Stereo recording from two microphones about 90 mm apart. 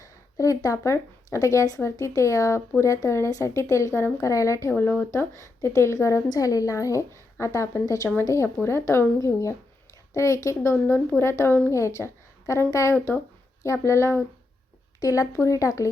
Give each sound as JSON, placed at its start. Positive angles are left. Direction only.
{"t": 0.0, "sound": "a woman's voice", "side_deg": 40}
{"t": 4.7, "sound": "speech", "side_deg": 20}
{"t": 5.1, "sound": "a woman's voice", "side_deg": 35}